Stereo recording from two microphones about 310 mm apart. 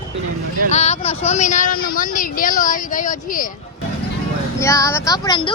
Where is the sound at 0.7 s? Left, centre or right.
Left.